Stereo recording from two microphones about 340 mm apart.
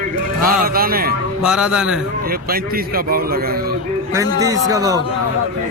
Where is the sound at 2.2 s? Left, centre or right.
Right.